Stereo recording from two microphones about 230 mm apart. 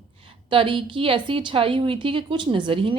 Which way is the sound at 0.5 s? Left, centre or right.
Right.